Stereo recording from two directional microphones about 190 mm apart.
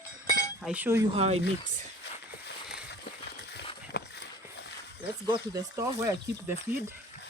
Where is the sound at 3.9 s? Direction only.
60° left (ahead or behind).